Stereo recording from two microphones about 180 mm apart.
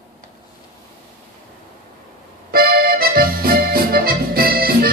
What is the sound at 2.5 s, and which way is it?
Accordion, 55° right (ahead or behind).